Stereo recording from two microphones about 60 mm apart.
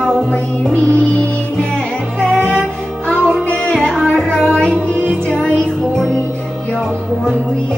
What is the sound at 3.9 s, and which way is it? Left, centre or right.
Music, centre.